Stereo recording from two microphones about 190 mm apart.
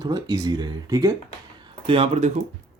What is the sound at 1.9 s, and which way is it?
Speech, 30° right (ahead or behind).